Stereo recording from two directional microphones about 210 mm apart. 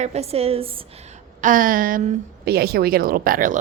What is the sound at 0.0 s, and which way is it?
Speech, 30° right (ahead or behind).